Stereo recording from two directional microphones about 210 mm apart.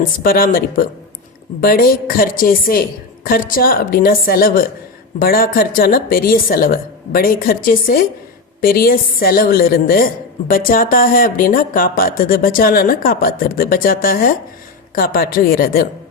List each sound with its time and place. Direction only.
0.2 s speech: 45° left (ahead or behind)